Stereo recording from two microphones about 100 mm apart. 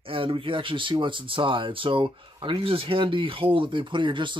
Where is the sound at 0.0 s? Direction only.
65° right (ahead or behind).